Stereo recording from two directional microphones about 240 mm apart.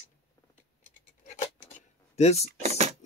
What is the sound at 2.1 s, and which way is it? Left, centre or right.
Speech, left.